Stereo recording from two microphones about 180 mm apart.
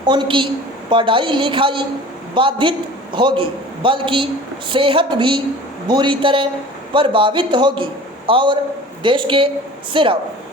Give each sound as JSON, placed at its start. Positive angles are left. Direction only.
{"t": 0.0, "sound": "a man's voice", "side_deg": -25}